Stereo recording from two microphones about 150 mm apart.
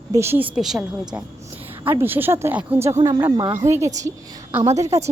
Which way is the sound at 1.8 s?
15° right (ahead or behind).